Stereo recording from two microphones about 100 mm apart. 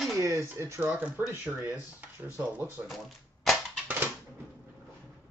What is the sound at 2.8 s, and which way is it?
Cash register, centre (ahead or behind).